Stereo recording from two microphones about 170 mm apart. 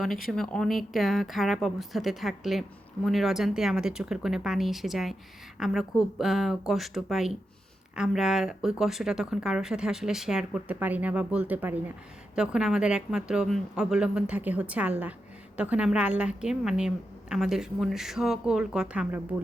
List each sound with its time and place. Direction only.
0.3 s speech: 5° left (ahead or behind)